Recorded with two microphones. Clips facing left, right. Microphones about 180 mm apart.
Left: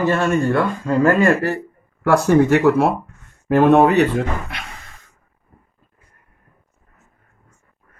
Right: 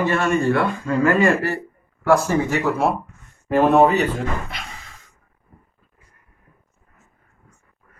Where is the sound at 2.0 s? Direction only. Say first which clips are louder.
Left 4 dB; 65° left (ahead or behind).